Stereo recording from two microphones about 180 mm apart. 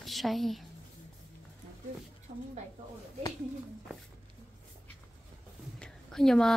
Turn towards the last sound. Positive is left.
turn(degrees=5)  # may be behind; listen again after turning